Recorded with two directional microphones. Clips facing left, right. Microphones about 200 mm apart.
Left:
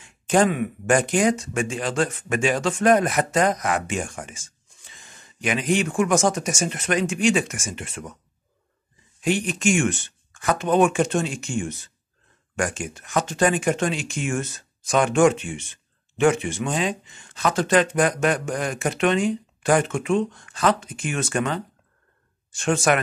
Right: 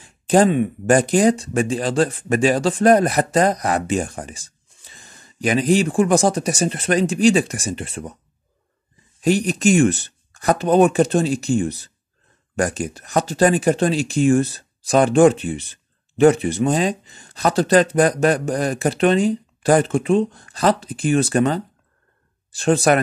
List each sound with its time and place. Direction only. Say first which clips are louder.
0.0 s speech: right 4 dB; 35° right (ahead or behind)
9.2 s speech: right 5 dB; 40° right (ahead or behind)